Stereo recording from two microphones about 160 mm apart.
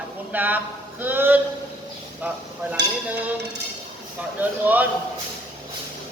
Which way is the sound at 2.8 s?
90° right.